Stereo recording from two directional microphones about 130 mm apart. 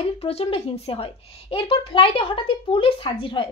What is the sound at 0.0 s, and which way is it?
A woman's voice, 50° left (ahead or behind).